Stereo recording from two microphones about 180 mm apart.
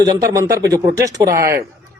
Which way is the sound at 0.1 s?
20° right (ahead or behind).